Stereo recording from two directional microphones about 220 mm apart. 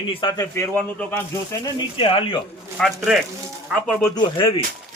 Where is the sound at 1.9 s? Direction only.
25° left (ahead or behind).